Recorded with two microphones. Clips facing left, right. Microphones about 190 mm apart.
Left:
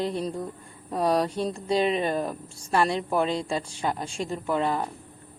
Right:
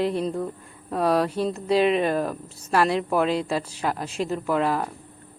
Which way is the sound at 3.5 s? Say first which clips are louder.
Right 2 dB; 30° left (ahead or behind).